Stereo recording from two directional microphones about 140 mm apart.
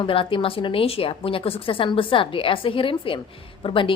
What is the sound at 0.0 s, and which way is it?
A woman's voice, 40° left (ahead or behind).